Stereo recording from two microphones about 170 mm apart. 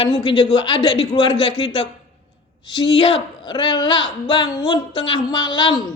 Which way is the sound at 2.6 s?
25° left (ahead or behind).